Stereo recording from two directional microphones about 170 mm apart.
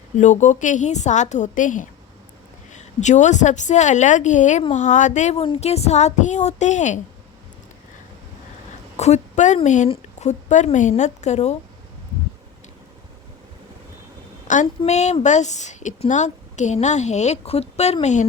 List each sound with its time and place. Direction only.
0.2 s speech: 45° left (ahead or behind)
9.0 s a woman's voice: 40° left (ahead or behind)
14.4 s a sound: 45° left (ahead or behind)
14.8 s speech: 40° left (ahead or behind)